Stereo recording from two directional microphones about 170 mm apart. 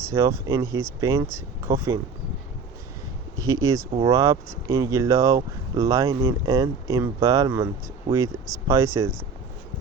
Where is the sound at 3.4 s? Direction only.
20° right (ahead or behind).